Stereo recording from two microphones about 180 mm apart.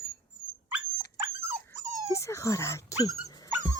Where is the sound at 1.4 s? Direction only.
15° right (ahead or behind).